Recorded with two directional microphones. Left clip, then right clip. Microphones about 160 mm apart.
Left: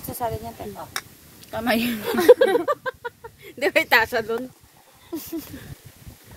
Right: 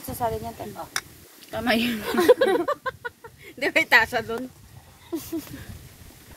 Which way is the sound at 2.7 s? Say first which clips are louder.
Left 2 dB; 70° left (ahead or behind).